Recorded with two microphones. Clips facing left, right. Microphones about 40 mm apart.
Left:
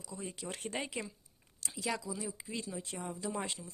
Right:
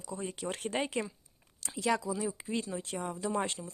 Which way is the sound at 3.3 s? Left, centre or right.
Right.